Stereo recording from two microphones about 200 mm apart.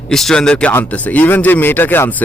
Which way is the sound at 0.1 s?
Centre (ahead or behind).